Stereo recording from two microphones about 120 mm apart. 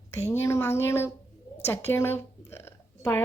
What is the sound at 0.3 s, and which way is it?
Speech, 20° left (ahead or behind).